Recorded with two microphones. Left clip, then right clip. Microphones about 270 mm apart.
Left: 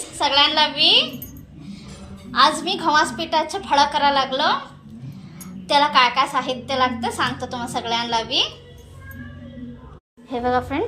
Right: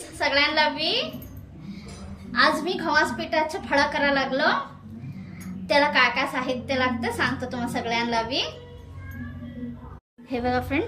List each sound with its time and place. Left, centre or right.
0.2 s a woman's voice: centre
2.3 s a woman's voice: centre
5.6 s a woman's voice: centre
10.2 s a woman's voice: centre